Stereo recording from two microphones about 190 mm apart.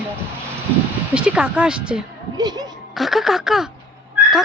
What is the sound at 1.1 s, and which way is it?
Speech, 5° right (ahead or behind).